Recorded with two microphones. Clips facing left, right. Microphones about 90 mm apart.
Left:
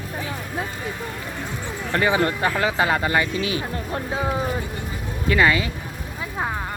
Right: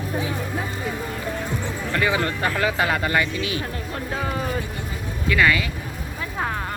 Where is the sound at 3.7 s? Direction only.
30° left (ahead or behind).